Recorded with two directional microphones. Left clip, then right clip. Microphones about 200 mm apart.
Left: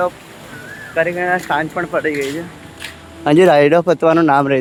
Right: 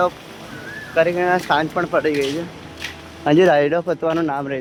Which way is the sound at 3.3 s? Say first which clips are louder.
Left 4 dB; 15° left (ahead or behind).